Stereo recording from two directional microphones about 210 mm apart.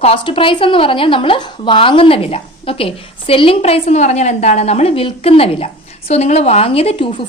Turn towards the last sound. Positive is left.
turn(degrees=25)  # may be behind; listen again after turning